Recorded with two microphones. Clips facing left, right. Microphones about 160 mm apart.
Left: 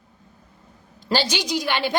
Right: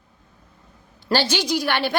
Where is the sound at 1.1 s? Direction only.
15° left (ahead or behind).